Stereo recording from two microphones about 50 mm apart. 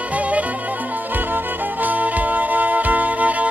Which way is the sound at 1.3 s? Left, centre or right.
Right.